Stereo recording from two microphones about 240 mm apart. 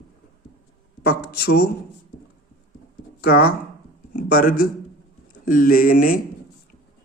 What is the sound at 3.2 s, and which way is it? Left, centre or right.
Speech, left.